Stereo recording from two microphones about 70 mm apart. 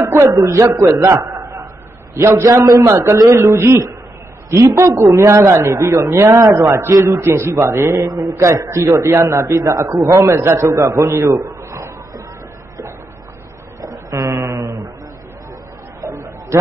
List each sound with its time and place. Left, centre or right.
0.0 s a man's voice: right
2.2 s a man's voice: right
6.9 s a man's voice: right
10.4 s a man's voice: right
13.7 s a sound: right
14.4 s mantra: right
16.0 s a sound: right